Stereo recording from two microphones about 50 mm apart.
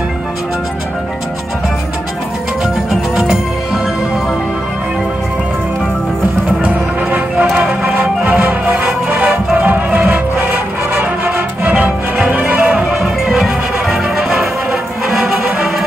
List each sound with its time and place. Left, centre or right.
2.6 s music: centre
6.6 s music: right
7.5 s music: centre
8.0 s music: right
12.7 s music: centre